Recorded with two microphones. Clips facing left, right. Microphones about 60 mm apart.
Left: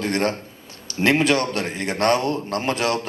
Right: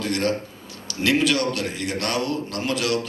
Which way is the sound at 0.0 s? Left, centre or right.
Left.